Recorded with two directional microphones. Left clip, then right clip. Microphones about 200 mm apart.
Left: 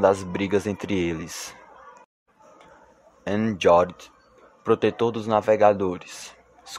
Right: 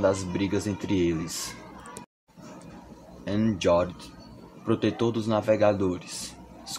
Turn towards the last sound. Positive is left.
turn(degrees=40)  # may be behind; listen again after turning